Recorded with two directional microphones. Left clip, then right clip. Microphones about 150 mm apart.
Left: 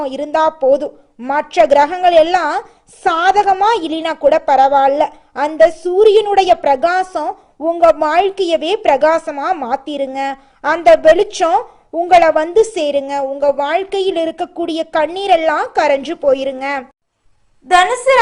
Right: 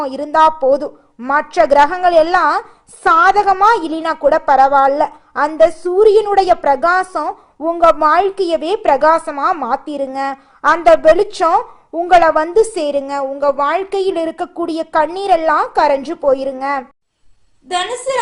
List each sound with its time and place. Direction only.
0.0 s a woman's voice: centre (ahead or behind)
17.7 s a woman's voice: 15° left (ahead or behind)